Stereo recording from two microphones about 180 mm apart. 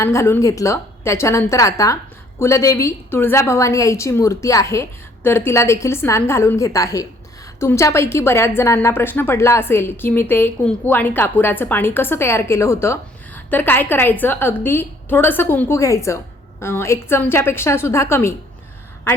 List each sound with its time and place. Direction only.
0.0 s a woman's voice: 15° left (ahead or behind)